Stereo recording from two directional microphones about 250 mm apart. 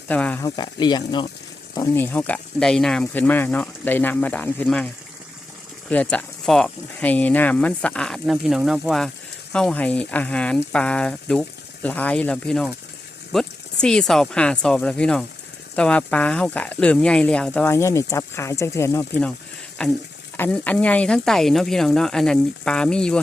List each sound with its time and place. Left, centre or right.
0.1 s speech: centre
5.9 s speech: centre